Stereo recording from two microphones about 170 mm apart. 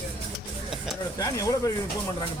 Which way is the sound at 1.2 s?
20° left (ahead or behind).